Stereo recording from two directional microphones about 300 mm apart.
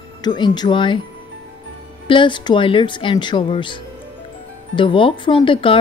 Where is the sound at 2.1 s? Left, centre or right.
Centre.